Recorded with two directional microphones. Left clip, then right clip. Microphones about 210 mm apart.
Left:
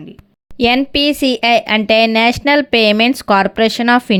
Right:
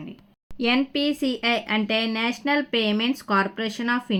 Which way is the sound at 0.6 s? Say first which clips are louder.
Left 10 dB; 45° left (ahead or behind).